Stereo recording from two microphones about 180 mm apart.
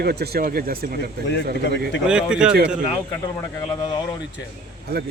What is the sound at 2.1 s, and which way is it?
Speech, 5° right (ahead or behind).